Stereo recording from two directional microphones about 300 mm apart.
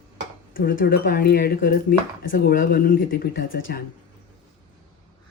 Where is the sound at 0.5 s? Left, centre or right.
Left.